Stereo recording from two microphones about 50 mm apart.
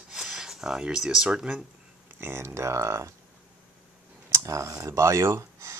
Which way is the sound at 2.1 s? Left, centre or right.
Right.